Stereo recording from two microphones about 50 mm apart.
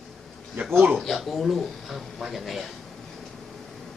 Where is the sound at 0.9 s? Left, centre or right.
Centre.